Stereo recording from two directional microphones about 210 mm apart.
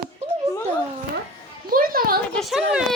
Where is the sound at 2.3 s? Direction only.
Centre (ahead or behind).